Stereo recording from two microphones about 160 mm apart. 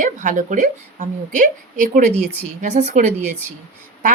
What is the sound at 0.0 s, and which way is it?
Speech, 50° right (ahead or behind).